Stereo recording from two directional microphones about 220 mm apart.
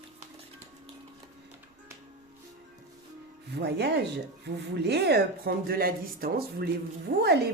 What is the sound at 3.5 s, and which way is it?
Speech, 50° right (ahead or behind).